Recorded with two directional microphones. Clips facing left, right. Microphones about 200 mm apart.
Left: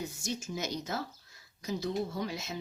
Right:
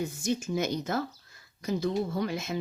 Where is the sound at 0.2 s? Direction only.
55° right (ahead or behind).